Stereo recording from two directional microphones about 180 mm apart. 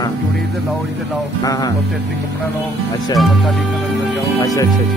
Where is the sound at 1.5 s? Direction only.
20° left (ahead or behind).